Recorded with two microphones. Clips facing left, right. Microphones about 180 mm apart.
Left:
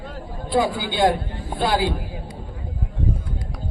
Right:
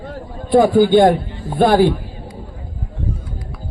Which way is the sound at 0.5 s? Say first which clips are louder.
Right 11 dB; 50° right (ahead or behind).